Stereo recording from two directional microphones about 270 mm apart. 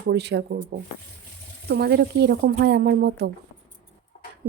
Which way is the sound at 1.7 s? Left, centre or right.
Right.